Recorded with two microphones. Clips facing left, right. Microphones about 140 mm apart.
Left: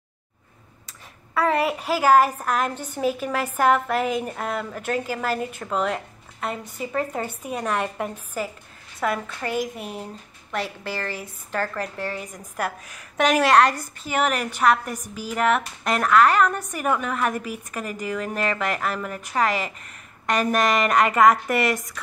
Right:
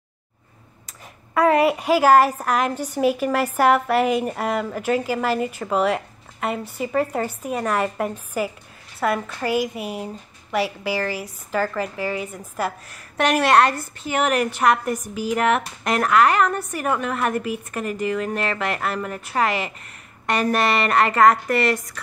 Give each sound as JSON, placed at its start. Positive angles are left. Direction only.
{"t": 1.3, "sound": "a woman's voice", "side_deg": -10}